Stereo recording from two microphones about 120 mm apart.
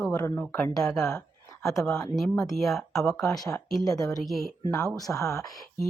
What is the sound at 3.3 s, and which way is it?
Speech, 30° left (ahead or behind).